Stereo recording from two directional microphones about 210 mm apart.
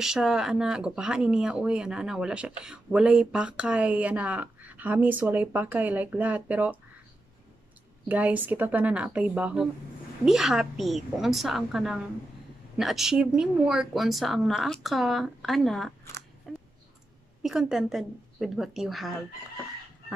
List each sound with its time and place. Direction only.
0.0 s speech: 5° right (ahead or behind)
8.1 s speech: 5° right (ahead or behind)
16.5 s a sound: centre (ahead or behind)
17.4 s speech: centre (ahead or behind)